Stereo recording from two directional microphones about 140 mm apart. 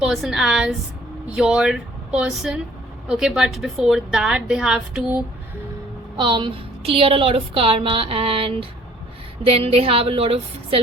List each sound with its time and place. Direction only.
0.0 s a woman's voice: 5° right (ahead or behind)
6.1 s a woman's voice: 35° right (ahead or behind)